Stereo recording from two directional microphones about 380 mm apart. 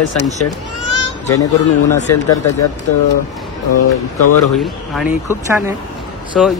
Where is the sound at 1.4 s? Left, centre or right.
Centre.